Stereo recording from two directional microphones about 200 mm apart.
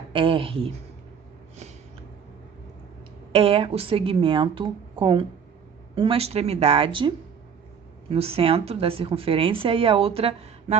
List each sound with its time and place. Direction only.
0.1 s speech: 25° right (ahead or behind)
3.3 s speech: 30° right (ahead or behind)
8.1 s speech: 30° right (ahead or behind)